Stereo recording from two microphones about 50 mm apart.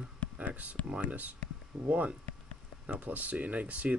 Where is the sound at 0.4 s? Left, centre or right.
Right.